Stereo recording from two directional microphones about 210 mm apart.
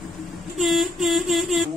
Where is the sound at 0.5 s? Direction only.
Centre (ahead or behind).